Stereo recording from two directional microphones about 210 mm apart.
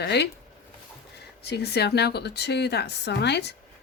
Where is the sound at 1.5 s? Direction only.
50° left (ahead or behind).